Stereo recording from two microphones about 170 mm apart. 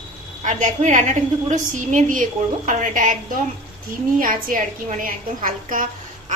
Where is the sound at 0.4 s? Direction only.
45° right (ahead or behind).